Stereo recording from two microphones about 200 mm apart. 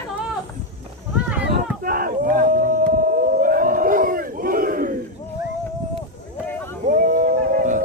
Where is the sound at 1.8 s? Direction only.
45° right (ahead or behind).